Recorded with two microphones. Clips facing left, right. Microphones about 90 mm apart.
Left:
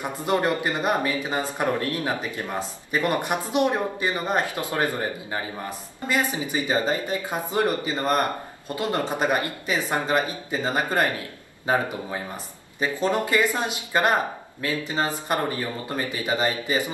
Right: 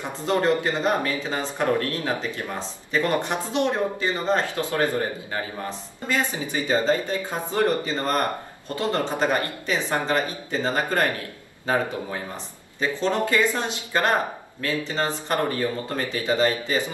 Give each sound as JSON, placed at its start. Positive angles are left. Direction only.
{"t": 0.0, "sound": "a man's voice", "side_deg": 15}